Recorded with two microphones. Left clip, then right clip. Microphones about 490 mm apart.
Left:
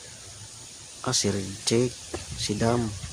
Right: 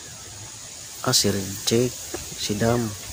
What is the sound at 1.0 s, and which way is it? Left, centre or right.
Speech, left.